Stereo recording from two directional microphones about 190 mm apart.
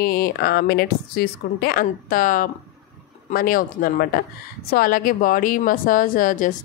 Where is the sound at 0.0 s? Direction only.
55° left (ahead or behind).